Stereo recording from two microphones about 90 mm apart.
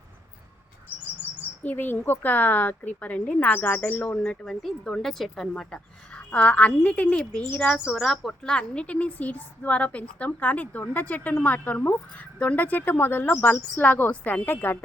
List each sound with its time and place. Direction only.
1.6 s a woman's voice: 20° left (ahead or behind)
4.4 s speech: 5° left (ahead or behind)
6.3 s a woman's voice: 15° left (ahead or behind)